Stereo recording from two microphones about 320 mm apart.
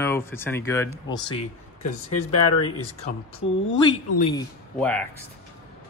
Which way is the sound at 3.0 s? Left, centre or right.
Centre.